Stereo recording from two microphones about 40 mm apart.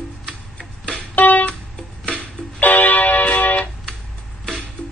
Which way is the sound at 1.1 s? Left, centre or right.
Left.